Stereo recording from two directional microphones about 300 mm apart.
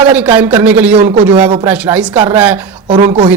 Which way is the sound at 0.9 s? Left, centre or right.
Right.